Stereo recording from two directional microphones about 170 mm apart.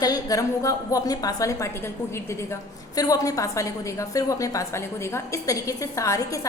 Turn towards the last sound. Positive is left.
turn(degrees=20)  # may be behind; listen again after turning